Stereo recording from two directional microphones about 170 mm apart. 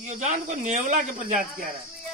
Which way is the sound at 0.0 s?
45° right (ahead or behind).